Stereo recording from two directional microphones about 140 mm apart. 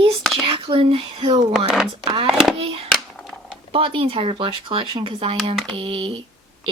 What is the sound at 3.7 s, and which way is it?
Speech, 40° right (ahead or behind).